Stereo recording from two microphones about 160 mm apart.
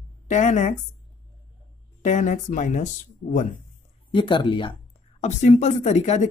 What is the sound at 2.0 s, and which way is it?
Speech, 50° left (ahead or behind).